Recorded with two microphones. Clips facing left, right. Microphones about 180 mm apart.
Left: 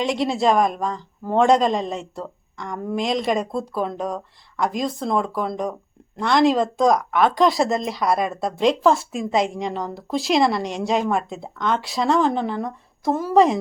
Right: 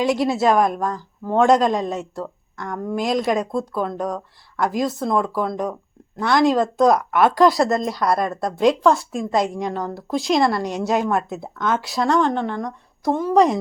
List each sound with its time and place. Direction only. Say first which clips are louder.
0.0 s speech: right 2 dB; 5° right (ahead or behind)